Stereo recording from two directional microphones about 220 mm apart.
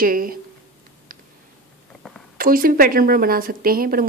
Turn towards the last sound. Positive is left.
turn(degrees=-40)  # may be behind; listen again after turning